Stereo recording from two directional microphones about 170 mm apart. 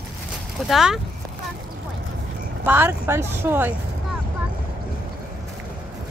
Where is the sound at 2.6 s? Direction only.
10° right (ahead or behind).